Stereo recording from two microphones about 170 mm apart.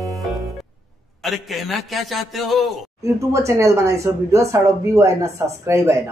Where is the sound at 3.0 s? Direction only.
20° right (ahead or behind).